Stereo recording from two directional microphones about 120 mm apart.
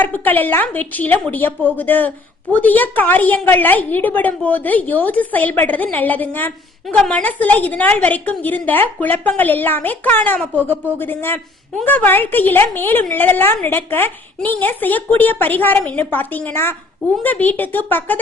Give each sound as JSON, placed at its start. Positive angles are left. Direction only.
{"t": 0.0, "sound": "a woman's voice", "side_deg": 15}